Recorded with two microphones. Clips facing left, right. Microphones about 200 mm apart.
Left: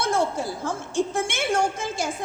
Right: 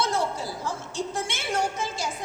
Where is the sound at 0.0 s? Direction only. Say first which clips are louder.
Left 3 dB; 50° left (ahead or behind).